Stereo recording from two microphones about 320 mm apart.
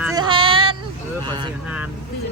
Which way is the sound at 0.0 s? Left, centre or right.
Centre.